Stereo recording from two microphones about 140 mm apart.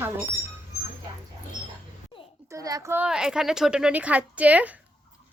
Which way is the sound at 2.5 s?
25° right (ahead or behind).